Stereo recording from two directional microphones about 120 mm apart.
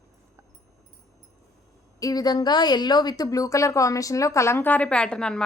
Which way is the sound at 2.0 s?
30° left (ahead or behind).